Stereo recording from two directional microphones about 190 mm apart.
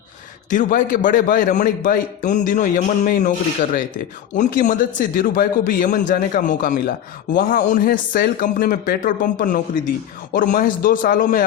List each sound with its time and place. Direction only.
0.5 s a man's voice: 45° left (ahead or behind)